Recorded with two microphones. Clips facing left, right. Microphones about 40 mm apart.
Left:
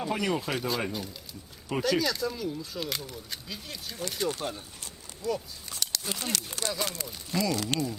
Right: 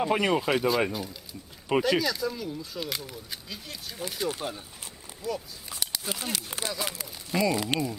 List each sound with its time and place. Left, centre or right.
0.0 s speech: right
0.9 s speech: centre
7.4 s speech: centre